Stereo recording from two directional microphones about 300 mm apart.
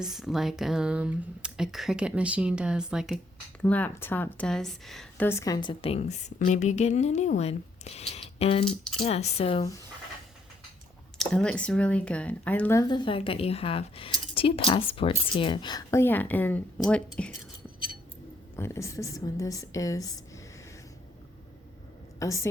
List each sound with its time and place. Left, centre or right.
0.0 s a woman's voice: centre
11.2 s speech: centre
18.5 s speech: centre
22.2 s speech: centre